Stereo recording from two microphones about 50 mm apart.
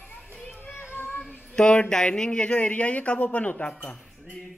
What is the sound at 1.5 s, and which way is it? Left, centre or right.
Speech, centre.